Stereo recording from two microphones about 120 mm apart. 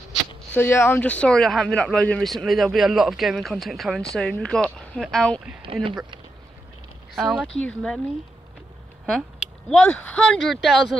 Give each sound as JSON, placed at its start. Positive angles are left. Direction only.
{"t": 0.6, "sound": "speech", "side_deg": 20}
{"t": 5.6, "sound": "speech", "side_deg": -45}
{"t": 7.2, "sound": "speech", "side_deg": -5}
{"t": 9.0, "sound": "speech", "side_deg": 0}